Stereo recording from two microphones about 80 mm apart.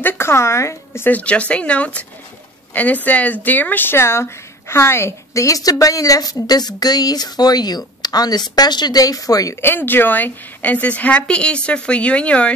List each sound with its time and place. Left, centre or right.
0.0 s speech: left
1.0 s a woman's voice: centre; by 9.6 s left
9.6 s a woman's voice: left